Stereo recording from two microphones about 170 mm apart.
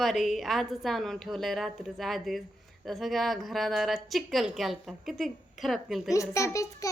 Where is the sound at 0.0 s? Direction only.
Centre (ahead or behind).